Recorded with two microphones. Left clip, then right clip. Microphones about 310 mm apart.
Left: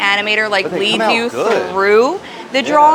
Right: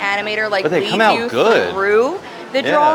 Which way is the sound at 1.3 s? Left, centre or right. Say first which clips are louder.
Right 2 dB; right.